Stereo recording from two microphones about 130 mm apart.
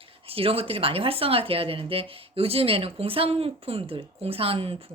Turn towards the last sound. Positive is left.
turn(degrees=-45)  # may be behind; listen again after turning